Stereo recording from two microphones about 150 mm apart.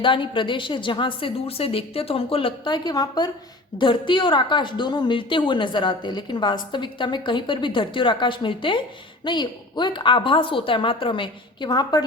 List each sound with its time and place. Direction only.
0.0 s a woman's voice: 35° left (ahead or behind)